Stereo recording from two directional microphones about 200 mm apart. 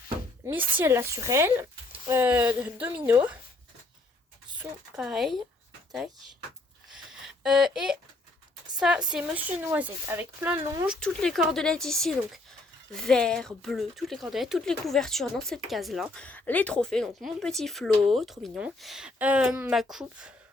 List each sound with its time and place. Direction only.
0.4 s speech: 10° right (ahead or behind)
4.6 s speech: 5° right (ahead or behind)
6.9 s a sound: centre (ahead or behind)
8.8 s speech: 5° right (ahead or behind)
10.8 s speech: 5° left (ahead or behind)